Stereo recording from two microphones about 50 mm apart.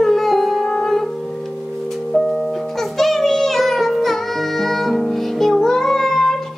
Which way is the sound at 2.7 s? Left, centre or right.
Centre.